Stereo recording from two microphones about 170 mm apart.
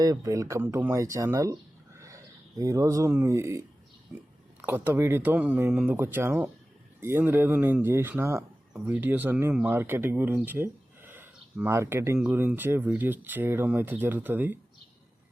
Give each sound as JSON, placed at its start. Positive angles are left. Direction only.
{"t": 0.0, "sound": "speech", "side_deg": -20}